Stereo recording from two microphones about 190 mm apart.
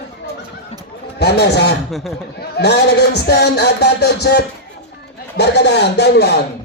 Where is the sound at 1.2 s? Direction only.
60° left (ahead or behind).